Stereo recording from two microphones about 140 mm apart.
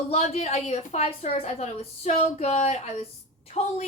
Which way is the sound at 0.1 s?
50° left (ahead or behind).